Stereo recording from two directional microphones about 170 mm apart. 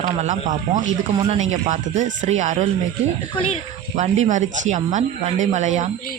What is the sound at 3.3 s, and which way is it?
Speech, 35° left (ahead or behind).